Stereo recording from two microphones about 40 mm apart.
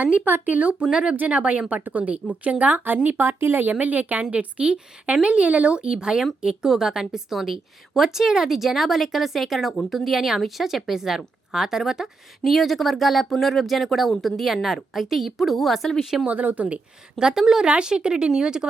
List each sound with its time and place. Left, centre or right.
0.3 s speech: right
0.6 s speech: right
0.9 s speech: centre
1.3 s a woman's voice: right
3.2 s speech: right
3.7 s a woman's voice: right; by 12.1 s centre
12.5 s a woman's voice: centre
16.0 s a woman's voice: centre
16.2 s speech: right
17.2 s a woman's voice: centre